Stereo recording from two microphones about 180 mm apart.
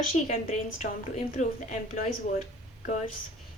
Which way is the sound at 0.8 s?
40° left (ahead or behind).